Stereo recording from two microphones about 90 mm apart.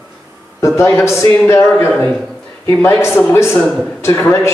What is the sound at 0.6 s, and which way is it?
A man's voice, 30° left (ahead or behind).